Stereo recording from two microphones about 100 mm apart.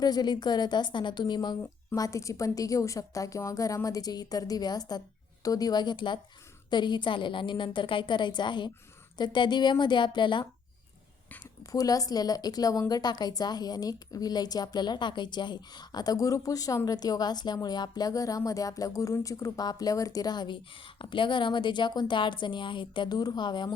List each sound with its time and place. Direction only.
0.0 s a woman's voice: 45° left (ahead or behind)
2.0 s a woman's voice: 30° left (ahead or behind); by 10.4 s 50° left (ahead or behind)
11.7 s a woman's voice: 35° left (ahead or behind)